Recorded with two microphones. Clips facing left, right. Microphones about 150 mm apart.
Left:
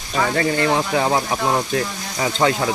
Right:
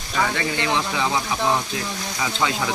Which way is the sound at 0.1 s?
40° left (ahead or behind).